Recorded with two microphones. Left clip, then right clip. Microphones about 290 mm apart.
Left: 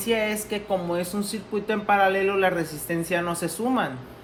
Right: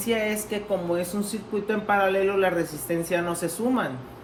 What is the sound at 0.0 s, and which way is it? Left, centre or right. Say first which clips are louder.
Speech: left 1 dB; left.